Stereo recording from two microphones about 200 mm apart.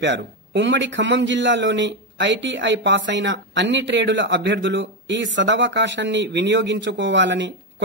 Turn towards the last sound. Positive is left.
turn(degrees=-65)  # may be behind; listen again after turning